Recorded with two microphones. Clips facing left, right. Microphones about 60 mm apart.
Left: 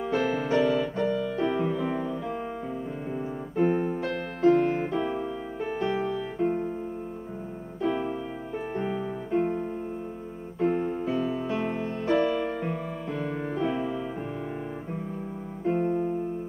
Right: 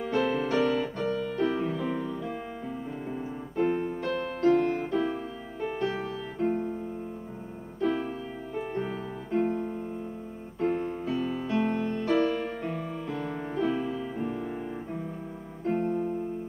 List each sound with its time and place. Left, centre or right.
0.0 s music: centre
1.9 s piano: centre
4.1 s music: centre
7.8 s music: centre
10.6 s piano: centre
11.1 s music: centre
15.8 s music: left